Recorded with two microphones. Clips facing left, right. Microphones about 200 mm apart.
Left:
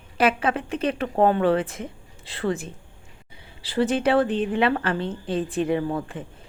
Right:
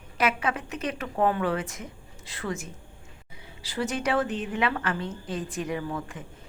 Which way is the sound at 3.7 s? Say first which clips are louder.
Left 7 dB; 30° left (ahead or behind).